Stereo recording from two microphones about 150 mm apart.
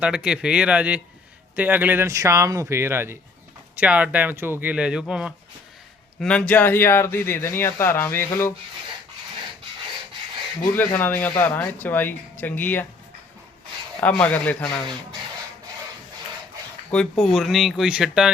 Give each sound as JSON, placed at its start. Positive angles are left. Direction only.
{"t": 0.0, "sound": "speech", "side_deg": -5}
{"t": 6.1, "sound": "speech", "side_deg": 5}
{"t": 10.8, "sound": "speech", "side_deg": 15}
{"t": 14.0, "sound": "speech", "side_deg": 10}
{"t": 16.9, "sound": "speech", "side_deg": 5}